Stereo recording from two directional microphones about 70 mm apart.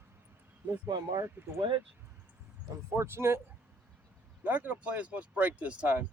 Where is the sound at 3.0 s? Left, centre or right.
Right.